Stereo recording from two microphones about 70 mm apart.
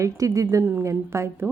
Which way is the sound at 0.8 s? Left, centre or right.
Right.